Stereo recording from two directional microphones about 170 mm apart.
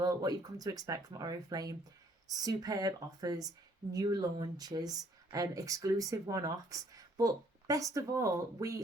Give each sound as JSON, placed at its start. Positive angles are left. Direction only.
{"t": 0.0, "sound": "speech", "side_deg": -20}